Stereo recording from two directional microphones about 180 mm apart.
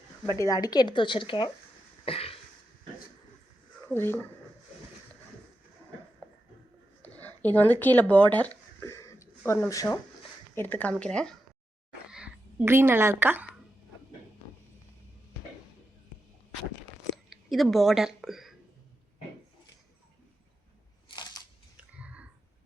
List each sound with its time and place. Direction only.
0.3 s speech: 20° left (ahead or behind)
2.0 s a sound: 30° left (ahead or behind)
3.8 s speech: 10° left (ahead or behind)
7.0 s a sound: 10° left (ahead or behind)
9.5 s speech: 15° left (ahead or behind)
12.1 s speech: 5° right (ahead or behind)
17.2 s a woman's voice: centre (ahead or behind)
21.8 s clicking: 5° right (ahead or behind)